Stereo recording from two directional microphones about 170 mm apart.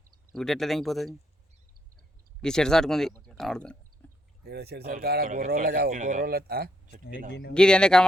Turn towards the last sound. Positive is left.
turn(degrees=5)  # may be behind; listen again after turning